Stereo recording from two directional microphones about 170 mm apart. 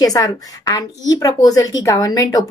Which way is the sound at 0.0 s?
20° left (ahead or behind).